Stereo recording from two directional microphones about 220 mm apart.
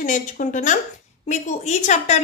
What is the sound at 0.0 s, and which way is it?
A woman's voice, 35° left (ahead or behind).